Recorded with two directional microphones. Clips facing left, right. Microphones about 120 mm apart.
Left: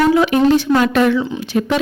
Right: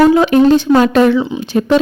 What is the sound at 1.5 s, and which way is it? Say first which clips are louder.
Speech: right 5 dB; 30° right (ahead or behind).